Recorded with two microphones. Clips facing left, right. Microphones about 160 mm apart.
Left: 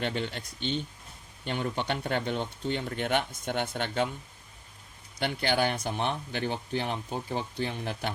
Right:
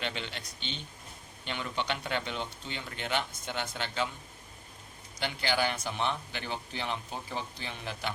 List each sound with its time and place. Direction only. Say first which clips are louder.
0.0 s speech: left 6 dB; 45° left (ahead or behind)
5.2 s speech: left 3 dB; 50° left (ahead or behind)